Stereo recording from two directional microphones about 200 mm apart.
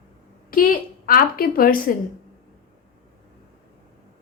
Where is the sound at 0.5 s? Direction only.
45° left (ahead or behind).